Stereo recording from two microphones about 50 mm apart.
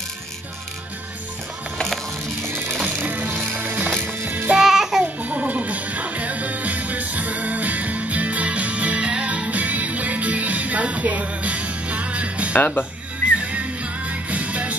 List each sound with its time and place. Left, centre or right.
2.4 s music: right
2.8 s music: right
4.6 s music: centre
5.0 s music: right
12.5 s speech: left
13.4 s music: right